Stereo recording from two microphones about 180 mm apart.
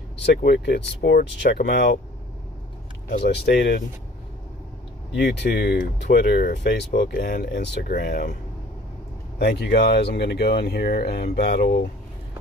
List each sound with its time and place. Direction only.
0.2 s speech: 60° left (ahead or behind)
3.3 s speech: 70° left (ahead or behind)
5.1 s speech: 70° left (ahead or behind); by 8.4 s 45° left (ahead or behind)
9.4 s speech: 65° left (ahead or behind)